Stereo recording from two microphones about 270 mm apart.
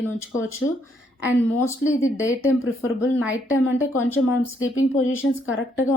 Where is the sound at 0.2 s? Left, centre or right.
Left.